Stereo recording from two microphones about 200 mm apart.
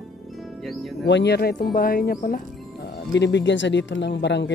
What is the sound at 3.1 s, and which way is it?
Speech, 60° left (ahead or behind).